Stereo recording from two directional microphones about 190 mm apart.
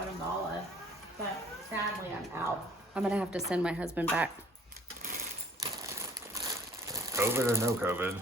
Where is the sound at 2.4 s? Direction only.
15° right (ahead or behind).